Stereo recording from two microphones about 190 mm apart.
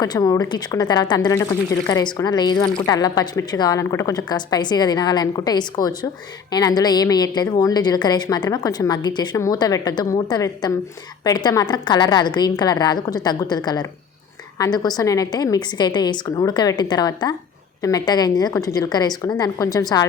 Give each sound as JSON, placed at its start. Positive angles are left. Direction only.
{"t": 0.0, "sound": "speech", "side_deg": 20}